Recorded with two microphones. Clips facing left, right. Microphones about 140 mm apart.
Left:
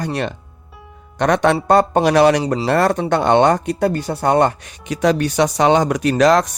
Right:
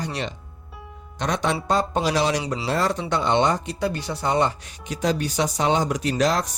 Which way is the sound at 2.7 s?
60° left (ahead or behind).